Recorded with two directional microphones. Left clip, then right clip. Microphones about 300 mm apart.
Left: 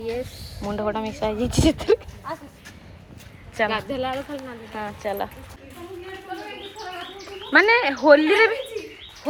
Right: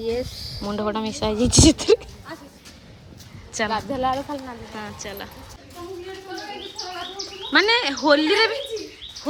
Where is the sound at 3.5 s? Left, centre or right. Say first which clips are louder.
Left 1 dB; centre.